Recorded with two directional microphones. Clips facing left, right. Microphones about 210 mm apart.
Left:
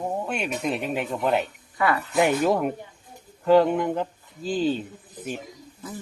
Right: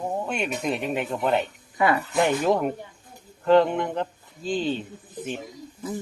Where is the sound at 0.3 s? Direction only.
Centre (ahead or behind).